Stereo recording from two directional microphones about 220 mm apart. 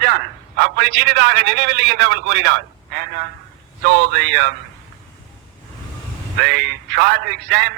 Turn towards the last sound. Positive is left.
turn(degrees=-50)  # may be behind; listen again after turning